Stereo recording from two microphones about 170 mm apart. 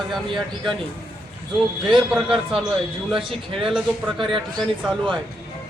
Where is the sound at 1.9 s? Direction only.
Centre (ahead or behind).